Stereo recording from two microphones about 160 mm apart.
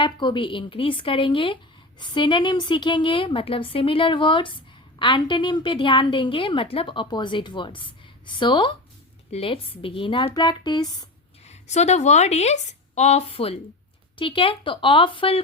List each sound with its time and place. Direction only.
0.0 s a woman's voice: 30° left (ahead or behind)
11.4 s a woman's voice: 45° left (ahead or behind)